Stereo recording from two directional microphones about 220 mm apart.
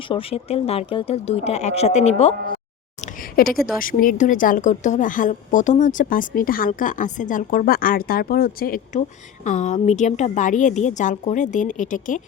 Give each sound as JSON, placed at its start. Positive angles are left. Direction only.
{"t": 0.1, "sound": "speech", "side_deg": 25}
{"t": 3.3, "sound": "speech", "side_deg": 40}